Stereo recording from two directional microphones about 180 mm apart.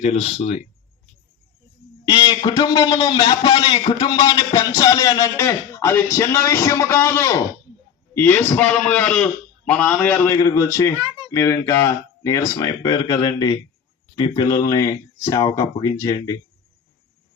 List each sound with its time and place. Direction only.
0.0 s speech: 35° left (ahead or behind)
2.0 s a man's voice: 25° left (ahead or behind); by 10.3 s 10° left (ahead or behind)
10.3 s a man's voice: 20° left (ahead or behind)